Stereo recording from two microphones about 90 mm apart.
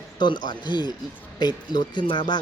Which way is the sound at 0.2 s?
55° left (ahead or behind).